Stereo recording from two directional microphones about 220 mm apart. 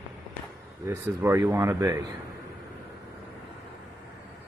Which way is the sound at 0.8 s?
10° right (ahead or behind).